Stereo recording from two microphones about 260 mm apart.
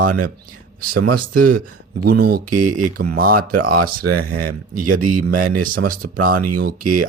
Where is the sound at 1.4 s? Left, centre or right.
Right.